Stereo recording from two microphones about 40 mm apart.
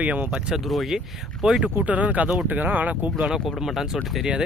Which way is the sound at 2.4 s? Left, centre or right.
Right.